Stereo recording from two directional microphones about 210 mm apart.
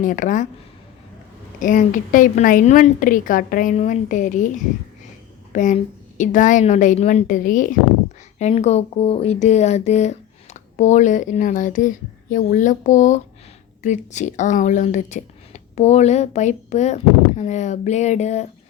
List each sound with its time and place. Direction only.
0.0 s speech: 40° left (ahead or behind)
1.5 s speech: 40° left (ahead or behind)